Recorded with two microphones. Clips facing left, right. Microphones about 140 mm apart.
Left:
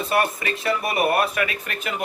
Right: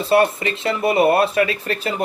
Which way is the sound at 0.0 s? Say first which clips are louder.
Right 6 dB; 30° right (ahead or behind).